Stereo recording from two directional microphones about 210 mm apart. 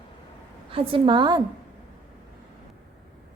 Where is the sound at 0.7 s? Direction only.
25° right (ahead or behind).